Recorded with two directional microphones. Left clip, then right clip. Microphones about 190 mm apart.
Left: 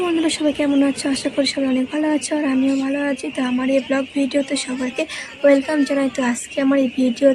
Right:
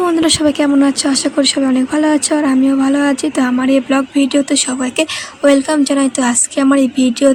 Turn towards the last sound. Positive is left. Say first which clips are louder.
# right 4 dB
turn(degrees=-25)  # may be behind; listen again after turning